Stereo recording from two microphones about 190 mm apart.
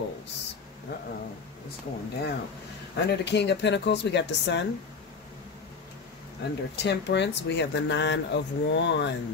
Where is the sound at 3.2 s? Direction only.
65° left (ahead or behind).